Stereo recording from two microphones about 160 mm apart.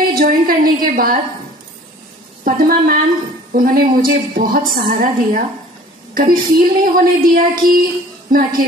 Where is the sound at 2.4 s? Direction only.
65° right (ahead or behind).